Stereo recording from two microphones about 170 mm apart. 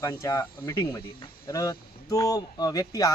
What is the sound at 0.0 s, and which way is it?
Speech, 20° left (ahead or behind).